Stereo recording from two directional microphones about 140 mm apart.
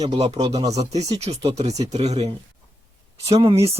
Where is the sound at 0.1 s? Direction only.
45° right (ahead or behind).